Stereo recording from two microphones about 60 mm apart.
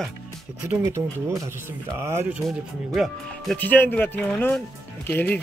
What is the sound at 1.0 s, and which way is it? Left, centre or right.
Speech, right.